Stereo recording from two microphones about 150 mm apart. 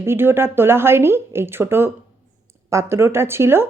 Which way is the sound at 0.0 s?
15° right (ahead or behind).